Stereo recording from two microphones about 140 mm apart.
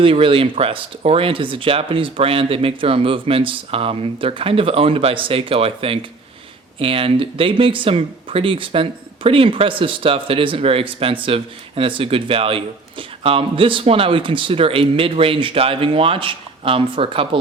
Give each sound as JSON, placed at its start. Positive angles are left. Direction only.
{"t": 0.0, "sound": "speech", "side_deg": -40}